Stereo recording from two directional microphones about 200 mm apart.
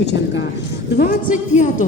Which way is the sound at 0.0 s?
60° left (ahead or behind).